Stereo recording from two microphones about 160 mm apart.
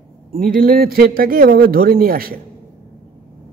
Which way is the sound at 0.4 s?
65° right (ahead or behind).